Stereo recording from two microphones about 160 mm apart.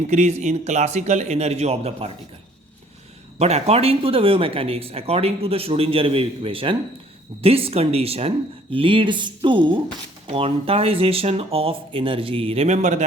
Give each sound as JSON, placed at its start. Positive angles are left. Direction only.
{"t": 0.1, "sound": "a man's voice", "side_deg": -45}
{"t": 3.3, "sound": "speech", "side_deg": -40}